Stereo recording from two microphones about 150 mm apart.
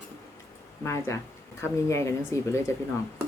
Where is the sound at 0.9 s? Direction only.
20° left (ahead or behind).